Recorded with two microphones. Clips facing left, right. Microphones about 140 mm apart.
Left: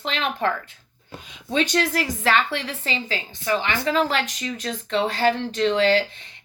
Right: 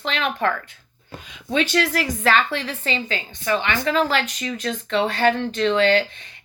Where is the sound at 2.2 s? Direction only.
25° left (ahead or behind).